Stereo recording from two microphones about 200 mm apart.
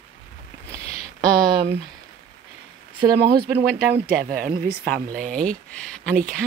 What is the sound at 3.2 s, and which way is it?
Speech, 50° right (ahead or behind).